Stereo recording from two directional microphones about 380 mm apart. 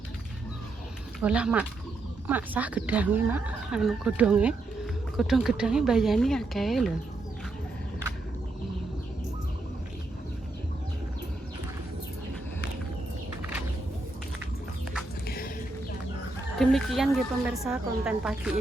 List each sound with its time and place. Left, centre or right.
1.2 s a woman's voice: centre
15.3 s bird: left
16.6 s a woman's voice: centre